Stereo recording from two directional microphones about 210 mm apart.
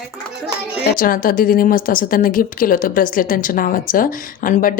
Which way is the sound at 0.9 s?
40° left (ahead or behind).